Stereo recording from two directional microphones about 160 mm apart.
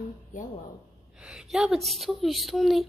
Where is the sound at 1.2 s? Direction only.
5° right (ahead or behind).